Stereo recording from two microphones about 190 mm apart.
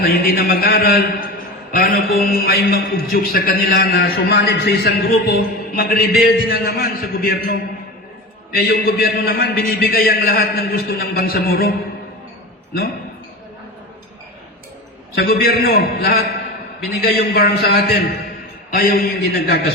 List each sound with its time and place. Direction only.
0.0 s a man's voice: 50° left (ahead or behind)
8.5 s a man's voice: 55° left (ahead or behind)
15.1 s a man's voice: 55° left (ahead or behind)